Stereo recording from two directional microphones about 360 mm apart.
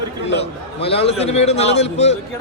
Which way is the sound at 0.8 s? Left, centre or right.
Centre.